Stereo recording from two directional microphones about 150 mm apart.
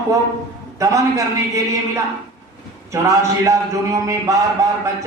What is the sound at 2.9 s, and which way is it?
A man's voice, 20° right (ahead or behind).